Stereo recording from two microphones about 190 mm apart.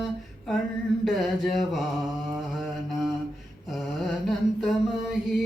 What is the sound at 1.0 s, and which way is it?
Mantra, centre (ahead or behind).